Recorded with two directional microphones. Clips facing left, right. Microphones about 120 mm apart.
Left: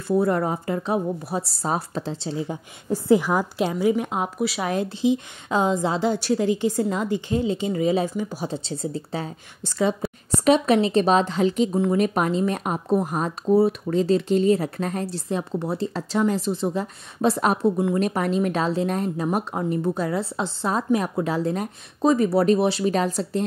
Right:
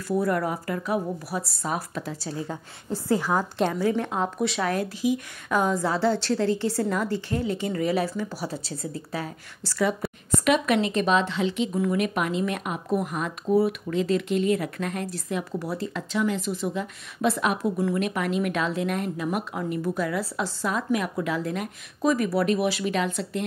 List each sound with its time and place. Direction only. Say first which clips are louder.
0.1 s a woman's voice: left 4 dB; 25° left (ahead or behind); by 11.7 s 40° left (ahead or behind)
11.7 s a woman's voice: left 4 dB; 30° left (ahead or behind)